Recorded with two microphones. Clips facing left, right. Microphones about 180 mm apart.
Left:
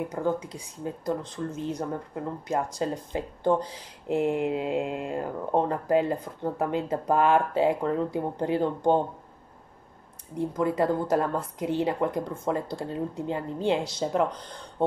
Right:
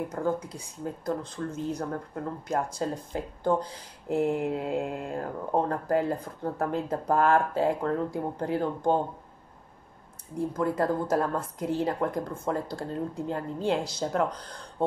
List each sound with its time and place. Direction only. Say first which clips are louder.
0.2 s speech: left 1 dB; 5° left (ahead or behind)
10.5 s speech: left 2 dB; centre (ahead or behind)